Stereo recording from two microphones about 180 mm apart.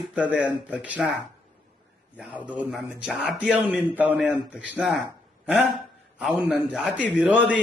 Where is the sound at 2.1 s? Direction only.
10° right (ahead or behind).